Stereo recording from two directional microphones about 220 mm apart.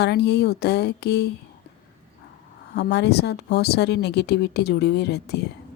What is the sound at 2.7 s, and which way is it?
Speech, 50° left (ahead or behind).